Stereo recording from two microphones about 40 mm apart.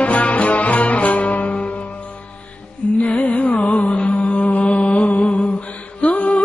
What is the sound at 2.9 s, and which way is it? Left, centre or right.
Music, left.